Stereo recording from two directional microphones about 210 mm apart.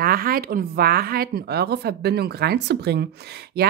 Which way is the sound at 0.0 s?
45° right (ahead or behind).